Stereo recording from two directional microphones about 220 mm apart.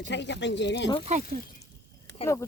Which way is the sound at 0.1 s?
50° left (ahead or behind).